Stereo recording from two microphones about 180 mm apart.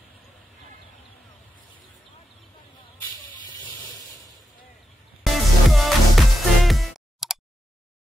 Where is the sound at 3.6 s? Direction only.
25° left (ahead or behind).